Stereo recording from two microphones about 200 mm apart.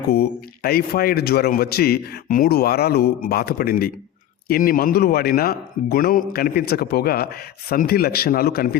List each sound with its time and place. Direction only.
0.1 s speech: 50° left (ahead or behind)